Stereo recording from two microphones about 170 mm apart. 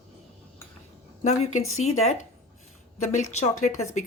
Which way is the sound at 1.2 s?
40° left (ahead or behind).